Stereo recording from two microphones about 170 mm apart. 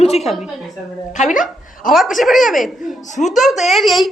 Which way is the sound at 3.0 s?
45° left (ahead or behind).